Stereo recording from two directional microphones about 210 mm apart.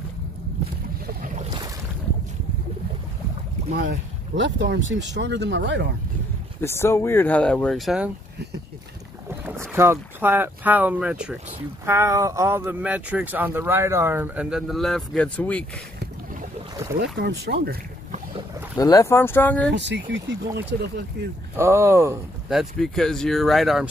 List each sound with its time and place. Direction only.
1.0 s boat: 40° right (ahead or behind)
4.4 s speech: 60° right (ahead or behind)
6.6 s speech: 10° left (ahead or behind)
9.4 s speech: 10° right (ahead or behind); by 15.6 s 5° left (ahead or behind)
17.2 s speech: 45° right (ahead or behind)
18.8 s speech: 15° left (ahead or behind)
19.7 s speech: 55° right (ahead or behind)
21.5 s speech: 15° right (ahead or behind)
22.5 s speech: centre (ahead or behind)